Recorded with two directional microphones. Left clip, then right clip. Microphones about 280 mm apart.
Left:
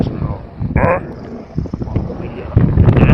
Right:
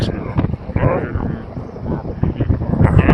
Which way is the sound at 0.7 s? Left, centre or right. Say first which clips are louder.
Left 4 dB; left.